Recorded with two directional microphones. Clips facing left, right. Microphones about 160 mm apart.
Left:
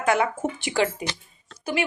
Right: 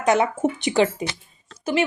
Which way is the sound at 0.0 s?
20° right (ahead or behind).